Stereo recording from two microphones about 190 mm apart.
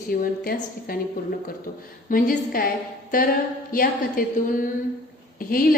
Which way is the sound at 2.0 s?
50° left (ahead or behind).